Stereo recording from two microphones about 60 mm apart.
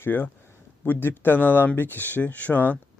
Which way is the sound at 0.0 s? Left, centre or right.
Left.